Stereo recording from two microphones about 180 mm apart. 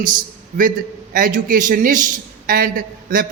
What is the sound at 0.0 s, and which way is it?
A man's voice, 50° right (ahead or behind).